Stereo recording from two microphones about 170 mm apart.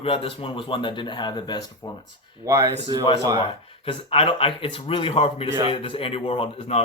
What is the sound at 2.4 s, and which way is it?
Speech, 15° right (ahead or behind).